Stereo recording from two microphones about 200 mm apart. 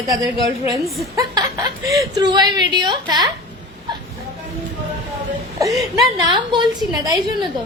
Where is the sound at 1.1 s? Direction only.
15° right (ahead or behind).